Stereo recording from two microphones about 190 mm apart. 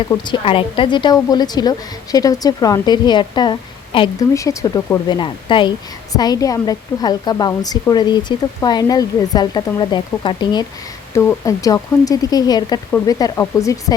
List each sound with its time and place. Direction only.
0.1 s speech: 25° left (ahead or behind)